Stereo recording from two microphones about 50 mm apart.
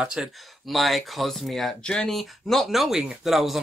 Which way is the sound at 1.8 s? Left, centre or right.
Centre.